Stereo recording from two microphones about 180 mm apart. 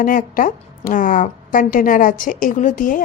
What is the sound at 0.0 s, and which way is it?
A woman's voice, 50° left (ahead or behind).